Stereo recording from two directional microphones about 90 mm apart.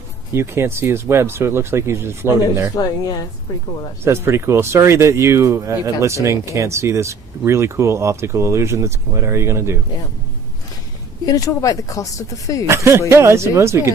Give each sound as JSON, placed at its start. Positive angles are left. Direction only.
{"t": 0.3, "sound": "speech", "side_deg": -30}
{"t": 2.7, "sound": "a woman's voice", "side_deg": 45}
{"t": 4.0, "sound": "speech", "side_deg": -30}
{"t": 11.3, "sound": "speech", "side_deg": 40}
{"t": 12.6, "sound": "speech", "side_deg": -30}